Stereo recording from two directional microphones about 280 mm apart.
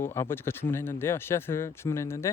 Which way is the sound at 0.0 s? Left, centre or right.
Centre.